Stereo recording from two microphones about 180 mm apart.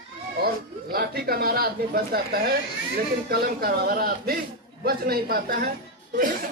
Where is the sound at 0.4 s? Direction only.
60° right (ahead or behind).